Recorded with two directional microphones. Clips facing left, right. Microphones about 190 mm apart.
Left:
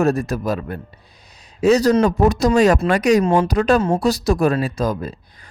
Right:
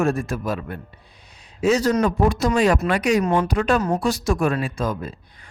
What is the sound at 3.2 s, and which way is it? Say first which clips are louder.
Speech: left 4 dB; 25° left (ahead or behind).